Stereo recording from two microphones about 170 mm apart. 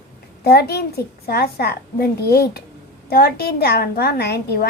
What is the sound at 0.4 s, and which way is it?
A child's voice, 70° left (ahead or behind).